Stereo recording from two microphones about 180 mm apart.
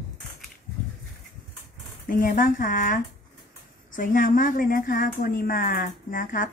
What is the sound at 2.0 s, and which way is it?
A woman's voice, 50° left (ahead or behind).